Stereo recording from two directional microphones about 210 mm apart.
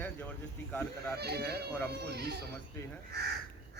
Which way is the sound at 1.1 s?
50° right (ahead or behind).